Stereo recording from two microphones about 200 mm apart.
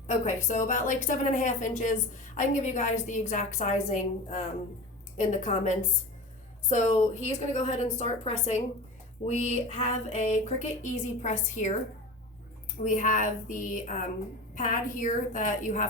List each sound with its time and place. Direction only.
0.4 s a woman's voice: 40° left (ahead or behind)
12.8 s a woman's voice: 40° left (ahead or behind)